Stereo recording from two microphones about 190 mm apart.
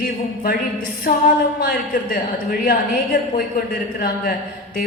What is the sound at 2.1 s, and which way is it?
Speech, 50° left (ahead or behind).